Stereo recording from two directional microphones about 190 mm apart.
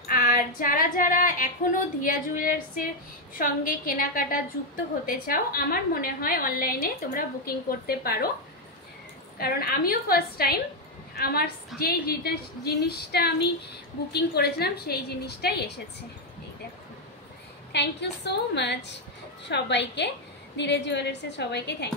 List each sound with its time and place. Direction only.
0.0 s female singing: 50° left (ahead or behind)
3.3 s a woman's voice: 45° left (ahead or behind)
9.4 s a woman's voice: 50° left (ahead or behind)
17.7 s a woman's voice: 65° left (ahead or behind)